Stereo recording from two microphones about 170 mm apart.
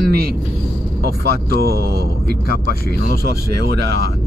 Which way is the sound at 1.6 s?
65° right (ahead or behind).